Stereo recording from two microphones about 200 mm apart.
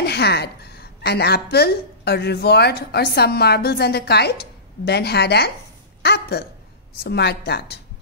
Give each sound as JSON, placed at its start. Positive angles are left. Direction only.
{"t": 0.0, "sound": "a woman's voice", "side_deg": 55}